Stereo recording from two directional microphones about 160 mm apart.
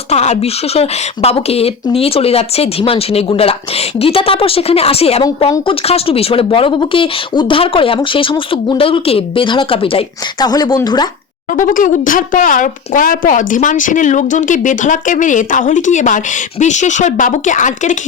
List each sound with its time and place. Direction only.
0.1 s speech: 45° left (ahead or behind); by 11.0 s 25° left (ahead or behind)
11.5 s speech: 55° left (ahead or behind)